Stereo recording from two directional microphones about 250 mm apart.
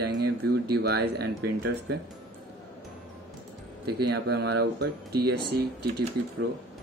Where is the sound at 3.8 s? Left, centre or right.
Right.